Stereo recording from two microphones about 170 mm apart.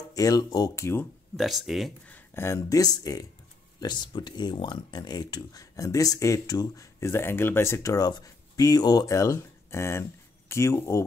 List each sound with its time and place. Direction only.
0.1 s speech: 20° left (ahead or behind)
1.3 s speech: centre (ahead or behind)
2.0 s speech: 10° left (ahead or behind)